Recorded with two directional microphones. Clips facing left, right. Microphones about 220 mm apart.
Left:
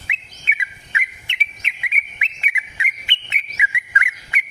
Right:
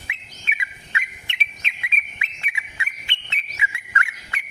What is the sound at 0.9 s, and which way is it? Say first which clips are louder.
Bird: left 1 dB; 15° left (ahead or behind).